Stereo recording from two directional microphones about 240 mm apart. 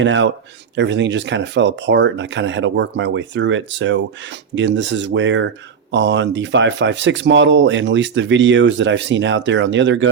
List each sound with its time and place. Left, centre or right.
0.0 s speech: right